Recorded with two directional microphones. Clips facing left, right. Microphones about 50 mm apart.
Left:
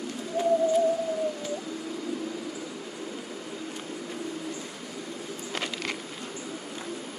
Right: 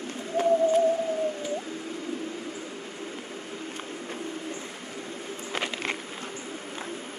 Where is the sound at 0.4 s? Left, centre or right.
Right.